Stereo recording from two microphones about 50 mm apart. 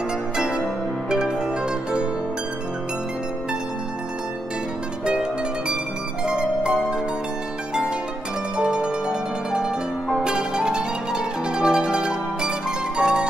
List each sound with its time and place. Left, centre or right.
0.4 s music: centre
1.1 s zither: centre
5.0 s music: centre
8.5 s music: centre